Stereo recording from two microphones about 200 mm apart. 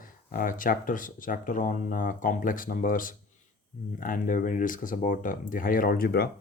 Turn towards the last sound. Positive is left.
turn(degrees=50)  # may be behind; listen again after turning